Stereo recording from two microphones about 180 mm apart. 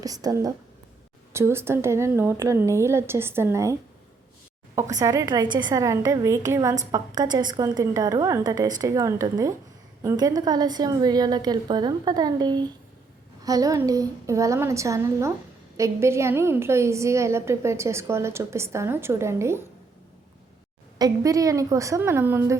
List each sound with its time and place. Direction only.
0.0 s a woman's voice: 20° right (ahead or behind)
21.0 s a woman's voice: 20° right (ahead or behind)